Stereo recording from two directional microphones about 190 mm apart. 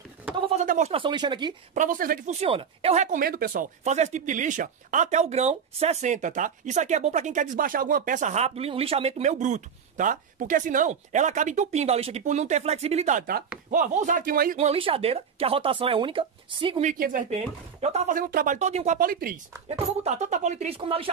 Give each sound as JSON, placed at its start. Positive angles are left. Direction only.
{"t": 0.6, "sound": "speech", "side_deg": -40}
{"t": 1.7, "sound": "speech", "side_deg": -45}
{"t": 2.4, "sound": "speech", "side_deg": -30}
{"t": 3.8, "sound": "speech", "side_deg": -35}
{"t": 14.6, "sound": "speech", "side_deg": -30}
{"t": 16.9, "sound": "speech", "side_deg": -45}
{"t": 20.0, "sound": "speech", "side_deg": -35}